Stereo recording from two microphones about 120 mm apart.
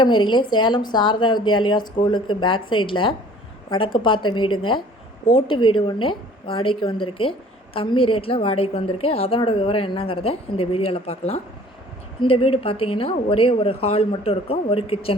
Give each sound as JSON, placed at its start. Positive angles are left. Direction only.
{"t": 0.0, "sound": "a woman's voice", "side_deg": 45}